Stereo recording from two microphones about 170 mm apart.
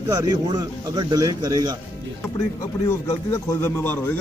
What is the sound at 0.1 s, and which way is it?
Speech, 25° right (ahead or behind).